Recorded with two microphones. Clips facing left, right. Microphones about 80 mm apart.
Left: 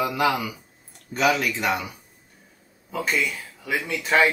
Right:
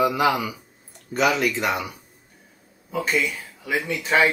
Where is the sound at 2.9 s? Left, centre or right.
Centre.